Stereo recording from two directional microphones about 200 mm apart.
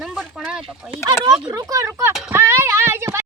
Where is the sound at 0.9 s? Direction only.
20° right (ahead or behind).